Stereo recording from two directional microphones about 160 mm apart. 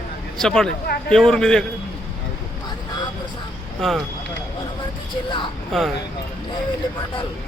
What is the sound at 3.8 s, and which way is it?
Speech, centre (ahead or behind).